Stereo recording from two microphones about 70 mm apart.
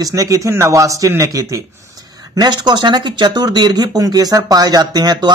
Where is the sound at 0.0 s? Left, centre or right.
Right.